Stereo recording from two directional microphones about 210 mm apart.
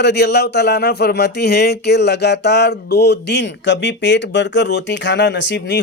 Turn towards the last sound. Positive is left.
turn(degrees=55)  # may be behind; listen again after turning